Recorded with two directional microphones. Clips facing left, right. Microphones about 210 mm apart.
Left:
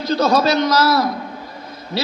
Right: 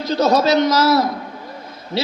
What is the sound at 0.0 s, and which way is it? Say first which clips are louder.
A man's voice: even; 20° right (ahead or behind).